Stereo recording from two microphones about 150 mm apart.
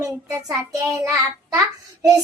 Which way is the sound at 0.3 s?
20° right (ahead or behind).